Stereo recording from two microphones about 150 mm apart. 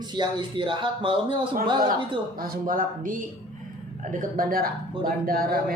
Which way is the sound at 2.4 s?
70° right (ahead or behind).